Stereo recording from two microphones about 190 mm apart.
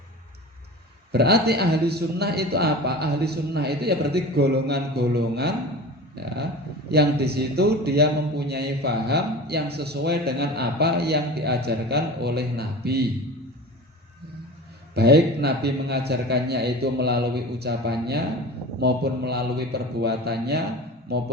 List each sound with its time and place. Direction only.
1.1 s a man's voice: 55° right (ahead or behind)
14.9 s a man's voice: 60° right (ahead or behind)